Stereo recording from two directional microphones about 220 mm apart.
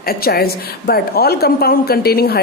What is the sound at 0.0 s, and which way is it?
A woman's voice, 45° left (ahead or behind).